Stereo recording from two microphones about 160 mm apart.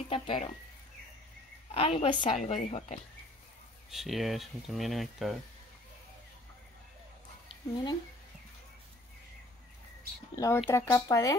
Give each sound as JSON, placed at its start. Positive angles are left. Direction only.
{"t": 0.1, "sound": "a woman's voice", "side_deg": 35}
{"t": 1.7, "sound": "a woman's voice", "side_deg": 35}
{"t": 2.3, "sound": "speech", "side_deg": 45}
{"t": 3.9, "sound": "speech", "side_deg": 0}
{"t": 7.4, "sound": "a sound", "side_deg": 30}
{"t": 10.3, "sound": "speech", "side_deg": 20}